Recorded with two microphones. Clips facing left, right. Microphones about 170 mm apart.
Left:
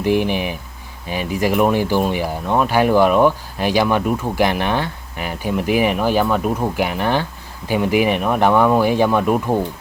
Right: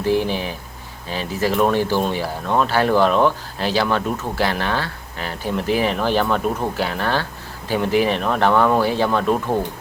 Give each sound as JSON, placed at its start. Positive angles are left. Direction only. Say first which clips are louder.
{"t": 0.0, "sound": "speech", "louder": "left 2 dB", "side_deg": 15}